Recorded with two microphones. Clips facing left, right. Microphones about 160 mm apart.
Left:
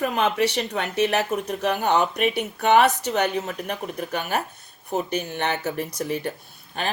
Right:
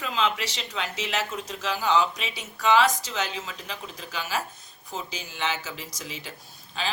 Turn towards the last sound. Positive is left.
turn(degrees=60)  # may be behind; listen again after turning